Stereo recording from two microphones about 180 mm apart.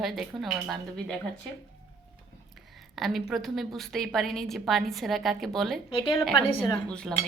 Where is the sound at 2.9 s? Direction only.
Centre (ahead or behind).